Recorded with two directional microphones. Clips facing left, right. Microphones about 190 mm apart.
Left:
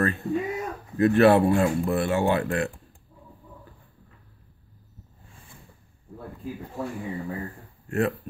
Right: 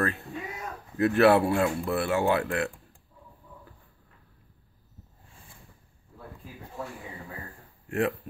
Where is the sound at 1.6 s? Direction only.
20° left (ahead or behind).